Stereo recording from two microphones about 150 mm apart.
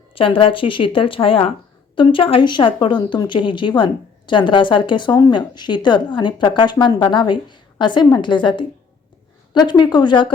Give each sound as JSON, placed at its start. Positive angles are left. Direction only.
{"t": 0.1, "sound": "speech", "side_deg": 35}